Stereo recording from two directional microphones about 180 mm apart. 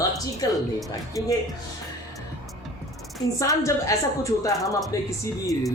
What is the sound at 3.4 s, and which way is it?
A woman's voice, 20° left (ahead or behind).